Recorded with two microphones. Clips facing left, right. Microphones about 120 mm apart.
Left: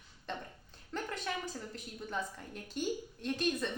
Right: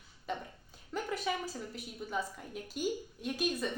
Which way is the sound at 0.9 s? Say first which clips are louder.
Right 3 dB; 5° right (ahead or behind).